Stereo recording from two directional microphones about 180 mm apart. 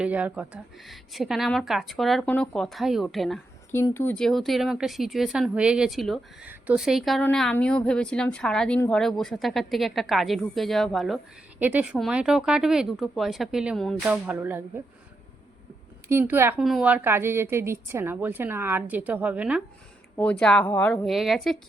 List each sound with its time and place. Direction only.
0.0 s a woman's voice: 10° right (ahead or behind)
3.7 s a woman's voice: 15° left (ahead or behind); by 14.6 s 10° right (ahead or behind)
16.0 s a woman's voice: 10° right (ahead or behind)
16.6 s a woman's voice: centre (ahead or behind)
20.4 s a woman's voice: 5° left (ahead or behind)